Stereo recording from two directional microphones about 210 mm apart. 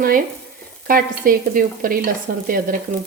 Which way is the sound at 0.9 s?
40° right (ahead or behind).